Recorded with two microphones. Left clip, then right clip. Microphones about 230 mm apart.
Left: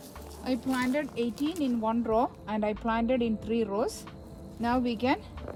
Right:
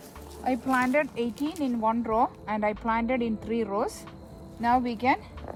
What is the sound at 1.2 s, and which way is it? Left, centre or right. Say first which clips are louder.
Speech: right 1 dB; centre.